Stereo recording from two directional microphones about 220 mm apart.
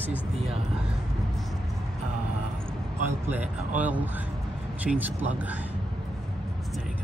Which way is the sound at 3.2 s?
5° right (ahead or behind).